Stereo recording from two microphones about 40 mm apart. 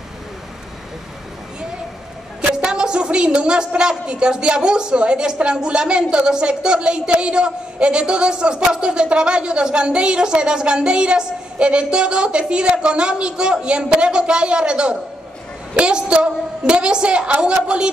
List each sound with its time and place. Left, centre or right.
2.5 s a woman's voice: centre